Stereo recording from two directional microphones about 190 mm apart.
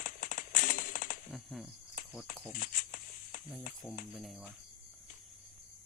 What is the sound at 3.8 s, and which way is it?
Cricket, centre (ahead or behind).